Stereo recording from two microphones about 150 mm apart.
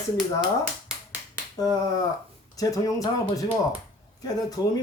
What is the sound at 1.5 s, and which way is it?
Speech, 25° left (ahead or behind).